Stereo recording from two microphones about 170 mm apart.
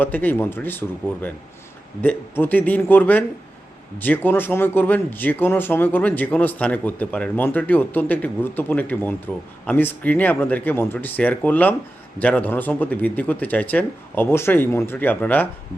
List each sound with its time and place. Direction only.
0.0 s speech: 10° left (ahead or behind)